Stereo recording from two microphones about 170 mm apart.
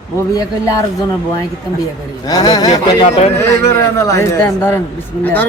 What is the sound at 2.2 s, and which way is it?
Speech, 20° left (ahead or behind).